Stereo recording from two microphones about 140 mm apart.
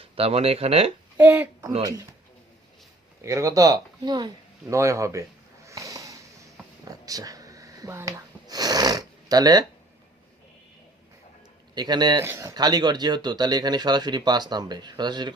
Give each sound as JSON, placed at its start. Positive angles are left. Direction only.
{"t": 0.0, "sound": "speech", "side_deg": -45}
{"t": 1.1, "sound": "a child's voice", "side_deg": -10}
{"t": 3.2, "sound": "speech", "side_deg": -20}
{"t": 5.6, "sound": "sniff", "side_deg": -25}
{"t": 6.9, "sound": "a sound", "side_deg": -25}
{"t": 11.7, "sound": "speech", "side_deg": -30}
{"t": 12.2, "sound": "speech", "side_deg": -20}